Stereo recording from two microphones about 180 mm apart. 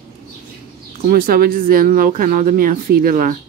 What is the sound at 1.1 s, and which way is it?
Speech, 55° right (ahead or behind).